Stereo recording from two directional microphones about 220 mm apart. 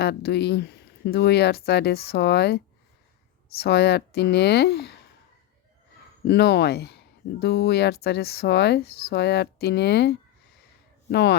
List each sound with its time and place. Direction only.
0.0 s speech: 45° left (ahead or behind)
3.6 s speech: 50° left (ahead or behind)
6.2 s speech: 50° left (ahead or behind)